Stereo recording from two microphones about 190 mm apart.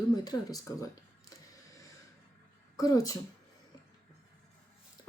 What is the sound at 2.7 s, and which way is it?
Speech, 20° left (ahead or behind).